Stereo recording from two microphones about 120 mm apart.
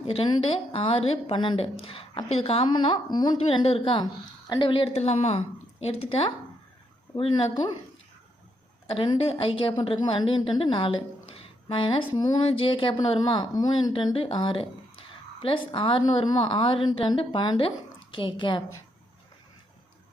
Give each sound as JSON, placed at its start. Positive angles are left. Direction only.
{"t": 0.0, "sound": "a woman's voice", "side_deg": 50}
{"t": 3.3, "sound": "a woman's voice", "side_deg": 50}
{"t": 4.7, "sound": "a woman's voice", "side_deg": 50}
{"t": 7.5, "sound": "a woman's voice", "side_deg": 40}
{"t": 8.9, "sound": "a woman's voice", "side_deg": 50}